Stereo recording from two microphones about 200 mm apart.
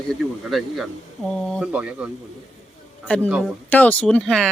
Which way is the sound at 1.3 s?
Centre (ahead or behind).